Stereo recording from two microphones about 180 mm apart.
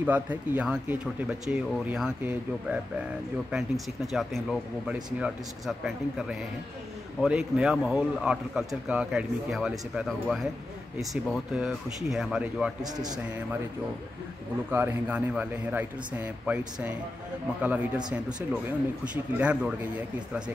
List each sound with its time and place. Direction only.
0.0 s a man's voice: 10° right (ahead or behind)
12.8 s a man's voice: 20° right (ahead or behind)
14.7 s speech: 10° right (ahead or behind)